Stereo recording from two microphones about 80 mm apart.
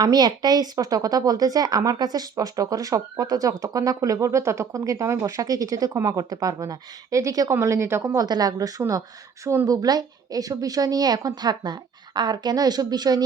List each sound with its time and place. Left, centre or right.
0.0 s a woman's voice: right
8.1 s speech: right
9.6 s a woman's voice: right